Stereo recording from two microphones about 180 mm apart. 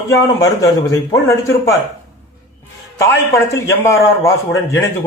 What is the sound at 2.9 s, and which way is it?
A man's voice, 15° left (ahead or behind).